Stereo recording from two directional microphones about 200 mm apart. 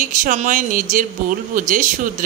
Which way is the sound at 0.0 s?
40° right (ahead or behind).